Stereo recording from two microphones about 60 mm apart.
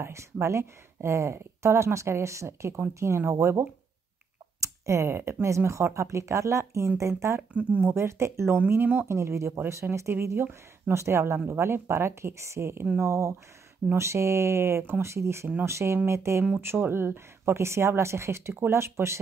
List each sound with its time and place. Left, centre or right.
0.0 s speech: right
7.5 s speech: right
7.8 s speech: right
8.5 s speech: right
9.0 s speech: right